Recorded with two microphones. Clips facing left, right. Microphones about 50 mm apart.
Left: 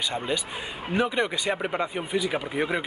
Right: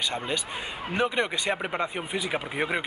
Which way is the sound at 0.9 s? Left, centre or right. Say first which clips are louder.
Left 1 dB; centre.